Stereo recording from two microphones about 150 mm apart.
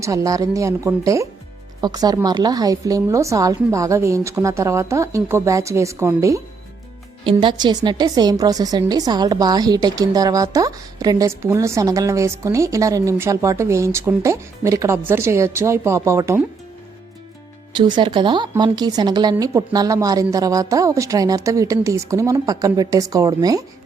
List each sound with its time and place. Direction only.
0.0 s a woman's voice: 20° right (ahead or behind)
7.3 s a woman's voice: 35° right (ahead or behind); by 16.4 s 20° right (ahead or behind)
17.7 s a woman's voice: 30° right (ahead or behind)